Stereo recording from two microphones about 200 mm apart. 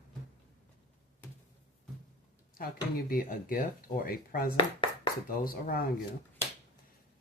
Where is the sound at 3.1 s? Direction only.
45° left (ahead or behind).